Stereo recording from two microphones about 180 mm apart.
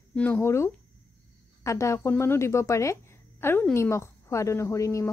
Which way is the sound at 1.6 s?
15° left (ahead or behind).